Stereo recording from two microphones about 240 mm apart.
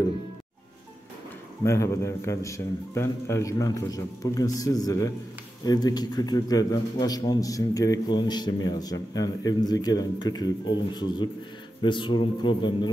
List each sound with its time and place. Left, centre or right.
1.6 s a man's voice: centre